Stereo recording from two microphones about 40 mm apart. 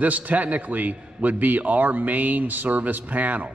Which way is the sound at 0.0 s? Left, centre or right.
Right.